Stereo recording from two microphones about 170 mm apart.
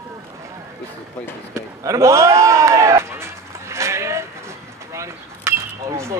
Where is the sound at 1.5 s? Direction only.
15° right (ahead or behind).